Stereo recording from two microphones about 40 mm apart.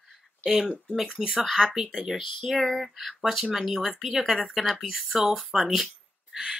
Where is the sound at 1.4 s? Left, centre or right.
Centre.